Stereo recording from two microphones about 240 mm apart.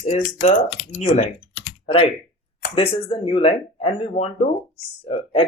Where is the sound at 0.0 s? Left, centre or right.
Left.